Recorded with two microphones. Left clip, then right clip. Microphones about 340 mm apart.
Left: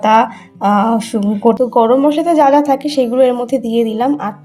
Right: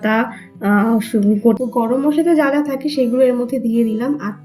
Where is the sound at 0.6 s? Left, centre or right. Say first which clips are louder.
Left 5 dB; left.